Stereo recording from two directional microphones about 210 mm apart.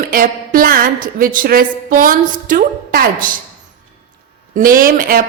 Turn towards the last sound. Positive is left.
turn(degrees=-40)  # may be behind; listen again after turning